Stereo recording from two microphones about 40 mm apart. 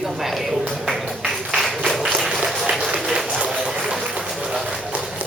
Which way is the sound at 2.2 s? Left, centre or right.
Centre.